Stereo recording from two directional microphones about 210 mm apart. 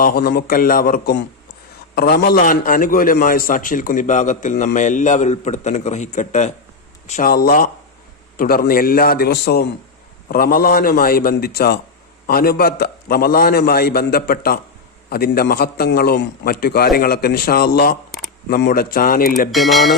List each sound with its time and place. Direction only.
0.0 s a man's voice: 45° left (ahead or behind)
19.5 s speech: centre (ahead or behind)